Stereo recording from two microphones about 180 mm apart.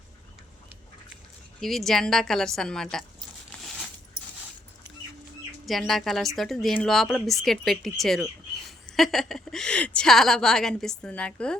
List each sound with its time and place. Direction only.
1.6 s speech: centre (ahead or behind)
5.6 s a woman's voice: centre (ahead or behind)